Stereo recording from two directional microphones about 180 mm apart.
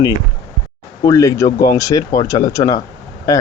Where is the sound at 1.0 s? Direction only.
15° left (ahead or behind).